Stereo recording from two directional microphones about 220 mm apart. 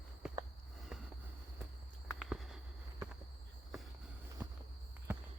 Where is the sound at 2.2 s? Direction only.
Centre (ahead or behind).